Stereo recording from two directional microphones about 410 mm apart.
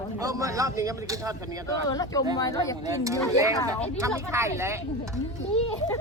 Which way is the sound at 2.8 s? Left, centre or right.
Centre.